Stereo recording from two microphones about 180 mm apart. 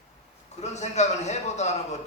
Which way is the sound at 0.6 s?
40° left (ahead or behind).